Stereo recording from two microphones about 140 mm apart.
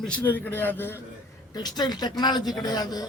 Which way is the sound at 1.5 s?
30° left (ahead or behind).